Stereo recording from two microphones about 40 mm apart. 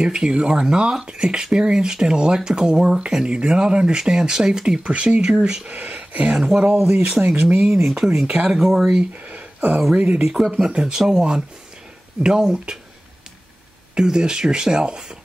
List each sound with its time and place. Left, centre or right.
0.0 s speech: right
4.8 s speech: right
5.2 s speech: centre
5.8 s speech: right
6.3 s speech: centre
6.8 s speech: right
7.1 s speech: centre
9.1 s a sound: right
9.9 s speech: right
10.2 s speech: centre
10.5 s speech: centre
13.9 s speech: centre